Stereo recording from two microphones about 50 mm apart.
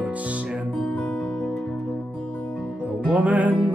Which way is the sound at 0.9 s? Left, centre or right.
Left.